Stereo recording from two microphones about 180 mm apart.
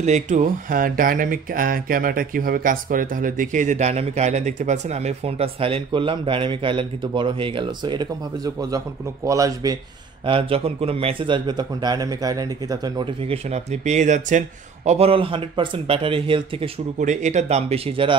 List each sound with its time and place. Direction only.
0.0 s speech: 40° right (ahead or behind); by 9.8 s 20° right (ahead or behind)
10.2 s speech: 30° right (ahead or behind)